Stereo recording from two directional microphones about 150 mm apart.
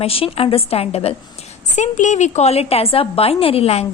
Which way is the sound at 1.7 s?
55° left (ahead or behind).